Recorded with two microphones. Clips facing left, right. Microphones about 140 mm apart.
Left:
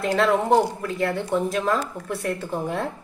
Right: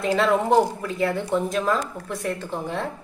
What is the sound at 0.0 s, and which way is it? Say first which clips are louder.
Speech: even; centre (ahead or behind).